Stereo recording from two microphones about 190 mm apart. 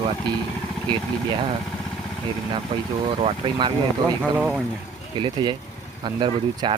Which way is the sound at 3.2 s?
30° right (ahead or behind).